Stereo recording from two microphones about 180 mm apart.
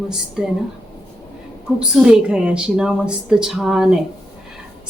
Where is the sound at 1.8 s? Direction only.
5° right (ahead or behind).